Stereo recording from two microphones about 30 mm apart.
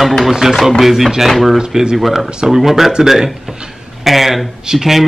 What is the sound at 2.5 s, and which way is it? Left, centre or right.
Speech, centre.